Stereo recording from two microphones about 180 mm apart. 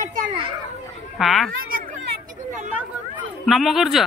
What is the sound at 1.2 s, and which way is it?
Speech, centre (ahead or behind).